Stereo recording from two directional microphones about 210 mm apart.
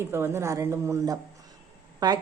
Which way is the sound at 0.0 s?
10° right (ahead or behind).